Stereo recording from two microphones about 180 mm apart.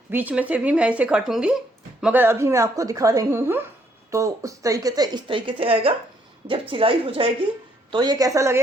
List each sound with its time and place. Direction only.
0.1 s a woman's voice: 10° right (ahead or behind)